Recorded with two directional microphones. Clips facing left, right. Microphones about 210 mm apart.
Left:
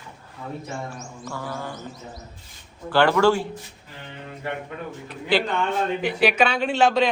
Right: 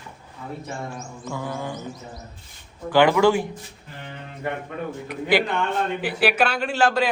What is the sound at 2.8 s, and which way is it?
Speech, 15° right (ahead or behind).